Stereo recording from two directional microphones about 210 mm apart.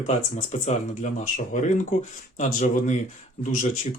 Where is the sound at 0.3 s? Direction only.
35° left (ahead or behind).